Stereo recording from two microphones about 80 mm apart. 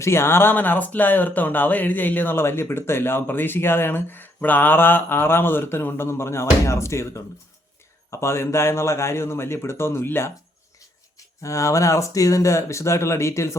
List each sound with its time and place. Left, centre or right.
0.0 s a man's voice: left
11.4 s a man's voice: left